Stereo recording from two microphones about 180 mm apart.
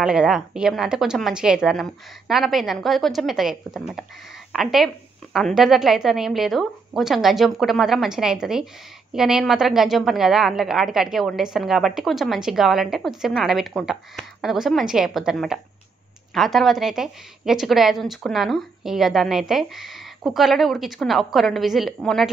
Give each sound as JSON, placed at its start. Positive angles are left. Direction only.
{"t": 0.0, "sound": "a woman's voice", "side_deg": -5}